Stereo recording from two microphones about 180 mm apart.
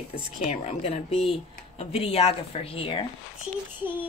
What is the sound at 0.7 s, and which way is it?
Speech, 35° left (ahead or behind).